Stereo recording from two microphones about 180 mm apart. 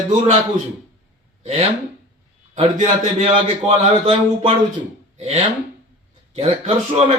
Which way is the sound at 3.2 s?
35° right (ahead or behind).